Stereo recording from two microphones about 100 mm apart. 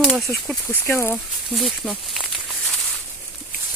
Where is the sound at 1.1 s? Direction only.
Centre (ahead or behind).